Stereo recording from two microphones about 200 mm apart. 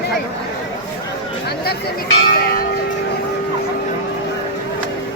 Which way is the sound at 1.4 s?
50° left (ahead or behind).